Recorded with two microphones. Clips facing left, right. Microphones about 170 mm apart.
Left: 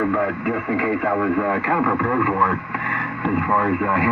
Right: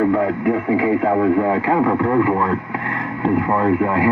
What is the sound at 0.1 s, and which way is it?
Speech, 30° right (ahead or behind).